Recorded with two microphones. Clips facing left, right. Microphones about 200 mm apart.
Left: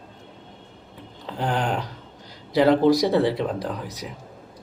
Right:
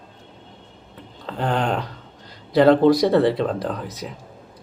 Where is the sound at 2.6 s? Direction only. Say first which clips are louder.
Right 3 dB; 15° left (ahead or behind).